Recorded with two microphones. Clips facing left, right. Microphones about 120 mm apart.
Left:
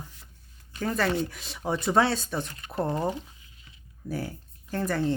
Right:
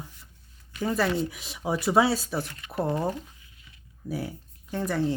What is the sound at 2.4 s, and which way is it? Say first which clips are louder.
Speech: even; 30° left (ahead or behind).